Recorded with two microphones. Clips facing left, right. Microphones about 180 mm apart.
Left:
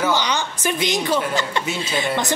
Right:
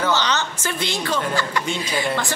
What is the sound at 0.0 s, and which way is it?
A woman's voice, 10° left (ahead or behind).